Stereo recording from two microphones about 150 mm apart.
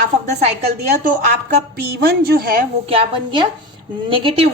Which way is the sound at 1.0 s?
65° right (ahead or behind).